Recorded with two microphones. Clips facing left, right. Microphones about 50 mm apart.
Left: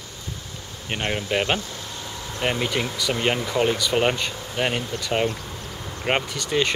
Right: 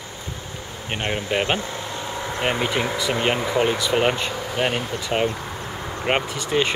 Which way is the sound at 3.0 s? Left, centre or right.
Right.